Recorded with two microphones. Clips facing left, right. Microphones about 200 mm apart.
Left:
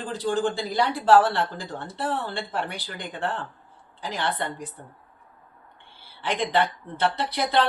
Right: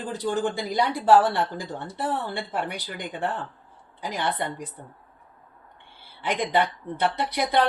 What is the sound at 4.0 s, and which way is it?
Speech, 15° right (ahead or behind).